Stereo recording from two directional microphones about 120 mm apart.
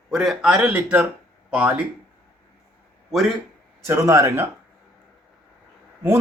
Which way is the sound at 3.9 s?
25° right (ahead or behind).